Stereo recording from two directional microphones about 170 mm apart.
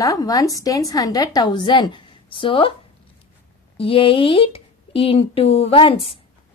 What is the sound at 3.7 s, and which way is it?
Speech, 30° left (ahead or behind).